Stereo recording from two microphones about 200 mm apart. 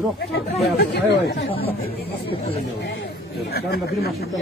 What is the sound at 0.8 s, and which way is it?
Speech, 55° left (ahead or behind).